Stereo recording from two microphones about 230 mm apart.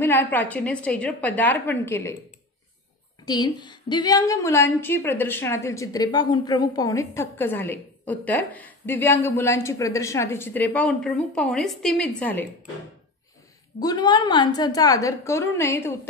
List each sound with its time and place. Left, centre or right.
0.0 s a woman's voice: centre
3.3 s a woman's voice: centre
13.7 s a woman's voice: centre